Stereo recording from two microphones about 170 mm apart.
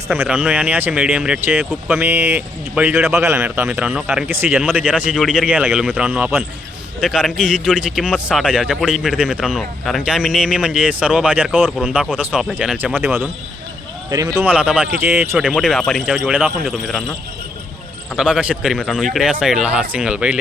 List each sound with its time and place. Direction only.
0.1 s speech: 10° right (ahead or behind)
4.5 s speech: centre (ahead or behind)
12.0 s speech: 10° right (ahead or behind)
14.4 s speech: 5° right (ahead or behind)
15.4 s speech: centre (ahead or behind)
18.2 s speech: 5° right (ahead or behind)